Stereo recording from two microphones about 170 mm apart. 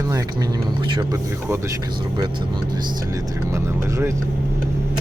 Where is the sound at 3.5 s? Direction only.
15° right (ahead or behind).